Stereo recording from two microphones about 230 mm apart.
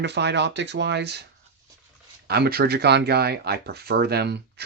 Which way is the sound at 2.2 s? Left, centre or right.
Right.